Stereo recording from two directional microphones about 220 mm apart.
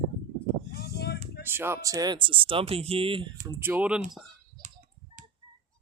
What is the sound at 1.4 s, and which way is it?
Speech, 10° right (ahead or behind).